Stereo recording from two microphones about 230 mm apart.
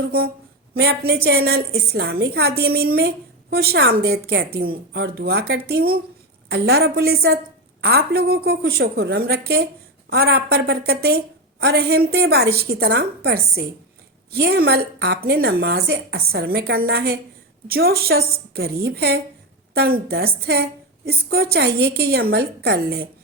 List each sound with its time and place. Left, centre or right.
0.7 s a woman's voice: right